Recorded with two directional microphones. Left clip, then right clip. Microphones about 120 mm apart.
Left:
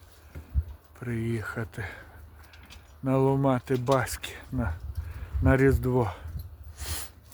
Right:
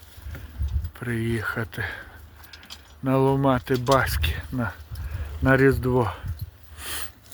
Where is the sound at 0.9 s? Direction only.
20° right (ahead or behind); by 6.2 s 10° left (ahead or behind).